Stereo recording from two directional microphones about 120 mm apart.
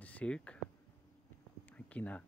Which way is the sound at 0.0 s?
10° left (ahead or behind).